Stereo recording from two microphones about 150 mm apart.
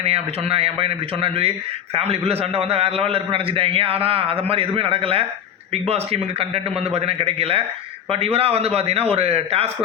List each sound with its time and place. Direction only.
0.0 s a man's voice: 40° right (ahead or behind)
6.4 s a man's voice: 40° right (ahead or behind)